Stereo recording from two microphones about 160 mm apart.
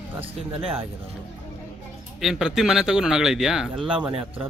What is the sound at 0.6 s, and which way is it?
Speech, 35° right (ahead or behind).